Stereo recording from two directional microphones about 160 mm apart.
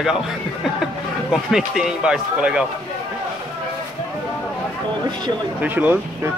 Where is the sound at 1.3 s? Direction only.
5° right (ahead or behind).